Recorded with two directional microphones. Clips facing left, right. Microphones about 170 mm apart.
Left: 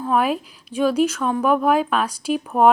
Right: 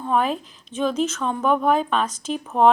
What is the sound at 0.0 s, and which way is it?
A woman's voice, 5° left (ahead or behind).